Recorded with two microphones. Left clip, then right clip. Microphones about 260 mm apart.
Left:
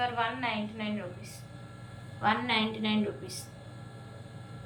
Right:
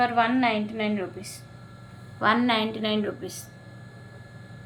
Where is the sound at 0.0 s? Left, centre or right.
Right.